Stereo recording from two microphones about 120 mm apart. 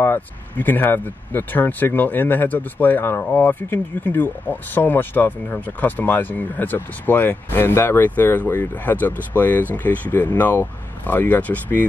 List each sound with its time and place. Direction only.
0.0 s speech: 15° left (ahead or behind)